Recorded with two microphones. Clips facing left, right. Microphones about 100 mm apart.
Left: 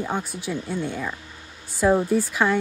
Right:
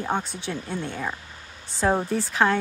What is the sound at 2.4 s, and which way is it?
Speech, 25° right (ahead or behind).